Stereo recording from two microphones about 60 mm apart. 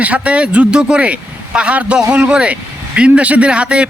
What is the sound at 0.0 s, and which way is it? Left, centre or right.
A man's voice, right.